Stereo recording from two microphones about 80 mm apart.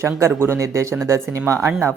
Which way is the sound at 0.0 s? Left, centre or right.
Right.